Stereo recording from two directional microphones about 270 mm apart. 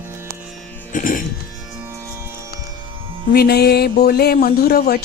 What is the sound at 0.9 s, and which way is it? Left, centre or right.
Music, left.